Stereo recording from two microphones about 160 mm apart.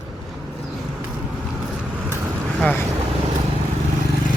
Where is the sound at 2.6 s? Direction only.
10° left (ahead or behind).